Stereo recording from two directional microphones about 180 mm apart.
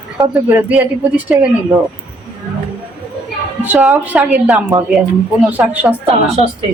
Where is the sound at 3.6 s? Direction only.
5° right (ahead or behind).